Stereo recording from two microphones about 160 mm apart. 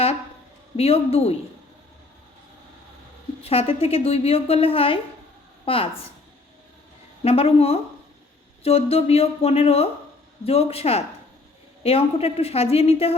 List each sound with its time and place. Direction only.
0.8 s a woman's voice: 40° left (ahead or behind)
3.4 s a woman's voice: 40° left (ahead or behind)
7.3 s a woman's voice: 40° left (ahead or behind)